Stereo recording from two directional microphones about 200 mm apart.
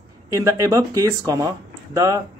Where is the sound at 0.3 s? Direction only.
15° right (ahead or behind).